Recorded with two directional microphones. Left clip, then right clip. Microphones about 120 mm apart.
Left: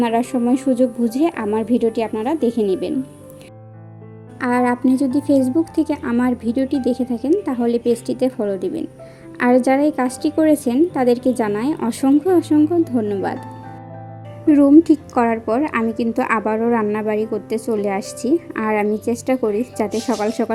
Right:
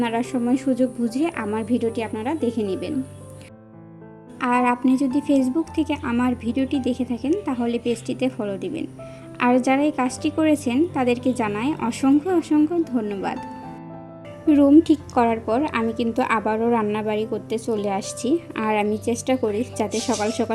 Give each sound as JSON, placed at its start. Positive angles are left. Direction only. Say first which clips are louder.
{"t": 0.0, "sound": "a woman's voice", "louder": "left 5 dB", "side_deg": 35}
{"t": 4.4, "sound": "a woman's voice", "louder": "left 2 dB", "side_deg": 25}
{"t": 14.4, "sound": "a woman's voice", "louder": "left 3 dB", "side_deg": 20}
{"t": 16.5, "sound": "speech", "louder": "left 3 dB", "side_deg": 10}
{"t": 17.5, "sound": "a woman's voice", "louder": "left 3 dB", "side_deg": 30}
{"t": 18.0, "sound": "speech", "louder": "left 4 dB", "side_deg": 0}
{"t": 19.0, "sound": "a woman's voice", "louder": "left 3 dB", "side_deg": 25}
{"t": 19.9, "sound": "speech", "louder": "left 2 dB", "side_deg": 5}